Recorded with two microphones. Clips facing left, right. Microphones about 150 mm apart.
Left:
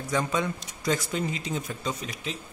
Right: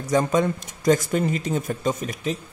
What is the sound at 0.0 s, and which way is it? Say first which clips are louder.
Speech: right 7 dB; 45° right (ahead or behind).